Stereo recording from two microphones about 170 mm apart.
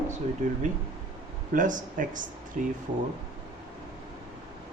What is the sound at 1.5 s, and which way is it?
Speech, 50° right (ahead or behind).